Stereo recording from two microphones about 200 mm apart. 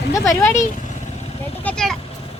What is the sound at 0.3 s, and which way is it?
Speech, 15° left (ahead or behind).